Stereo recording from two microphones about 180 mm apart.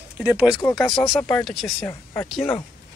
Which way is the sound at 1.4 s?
Centre (ahead or behind).